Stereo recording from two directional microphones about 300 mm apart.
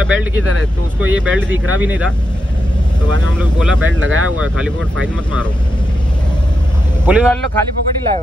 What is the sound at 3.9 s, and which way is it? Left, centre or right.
Speech, right.